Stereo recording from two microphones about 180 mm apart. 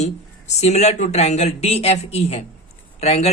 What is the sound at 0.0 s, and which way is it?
A man's voice, 40° left (ahead or behind).